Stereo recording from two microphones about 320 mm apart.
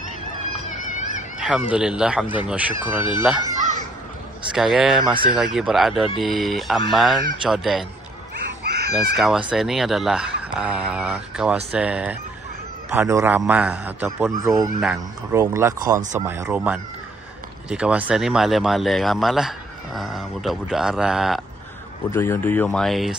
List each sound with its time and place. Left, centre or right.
0.7 s a sound: left
1.4 s speech: centre
3.5 s children playing: right
4.5 s speech: centre
8.6 s chicken: right
8.9 s speech: centre